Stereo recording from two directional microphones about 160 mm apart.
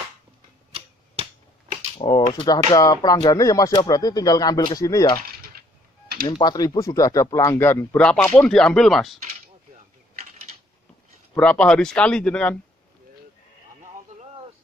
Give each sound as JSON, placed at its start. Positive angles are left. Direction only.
{"t": 2.0, "sound": "speech", "side_deg": 30}
{"t": 6.2, "sound": "speech", "side_deg": 25}
{"t": 11.3, "sound": "speech", "side_deg": 5}